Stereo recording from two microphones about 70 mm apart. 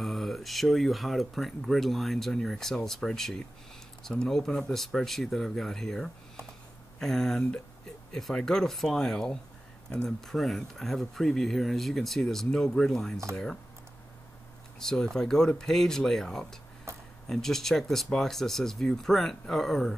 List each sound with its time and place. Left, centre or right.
0.0 s speech: centre
14.8 s speech: centre
16.9 s a sound: right
17.3 s speech: centre